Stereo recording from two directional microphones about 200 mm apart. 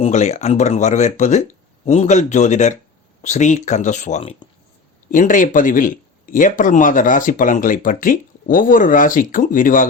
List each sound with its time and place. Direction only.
0.0 s speech: 35° left (ahead or behind)
5.1 s speech: 40° left (ahead or behind)